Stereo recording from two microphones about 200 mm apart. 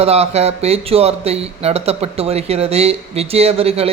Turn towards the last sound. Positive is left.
turn(degrees=-30)  # may be behind; listen again after turning